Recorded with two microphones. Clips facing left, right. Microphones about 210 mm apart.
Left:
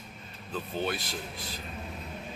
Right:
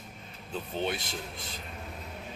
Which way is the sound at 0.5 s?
25° right (ahead or behind).